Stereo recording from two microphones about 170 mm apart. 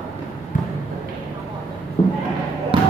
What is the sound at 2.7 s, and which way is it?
Basketball bounce, 30° right (ahead or behind).